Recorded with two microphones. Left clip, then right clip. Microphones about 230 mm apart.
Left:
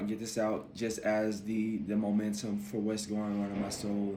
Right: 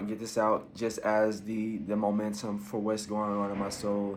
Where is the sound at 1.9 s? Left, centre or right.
Right.